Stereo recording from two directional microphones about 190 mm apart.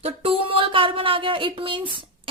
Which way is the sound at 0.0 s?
30° right (ahead or behind).